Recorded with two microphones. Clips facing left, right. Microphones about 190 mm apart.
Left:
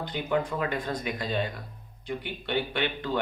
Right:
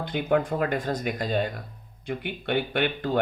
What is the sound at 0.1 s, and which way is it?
A man's voice, 55° right (ahead or behind).